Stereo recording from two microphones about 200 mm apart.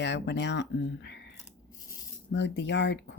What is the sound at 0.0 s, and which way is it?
Speech, 60° left (ahead or behind).